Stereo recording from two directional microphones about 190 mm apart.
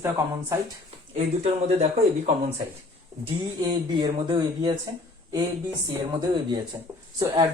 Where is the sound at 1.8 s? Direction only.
35° right (ahead or behind).